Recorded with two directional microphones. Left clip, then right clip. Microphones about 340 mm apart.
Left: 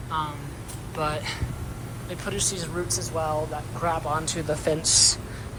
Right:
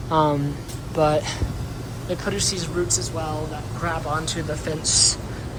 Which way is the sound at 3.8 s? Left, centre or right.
Centre.